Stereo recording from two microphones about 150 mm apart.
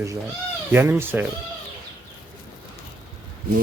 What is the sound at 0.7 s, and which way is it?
Speech, 15° right (ahead or behind).